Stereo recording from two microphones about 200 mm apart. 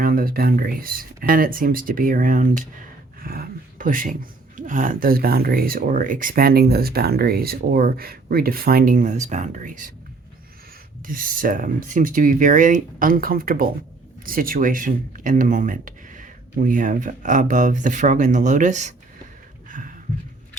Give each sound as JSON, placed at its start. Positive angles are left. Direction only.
{"t": 0.0, "sound": "speech", "side_deg": -45}
{"t": 11.0, "sound": "speech", "side_deg": -45}
{"t": 19.6, "sound": "a sound", "side_deg": -40}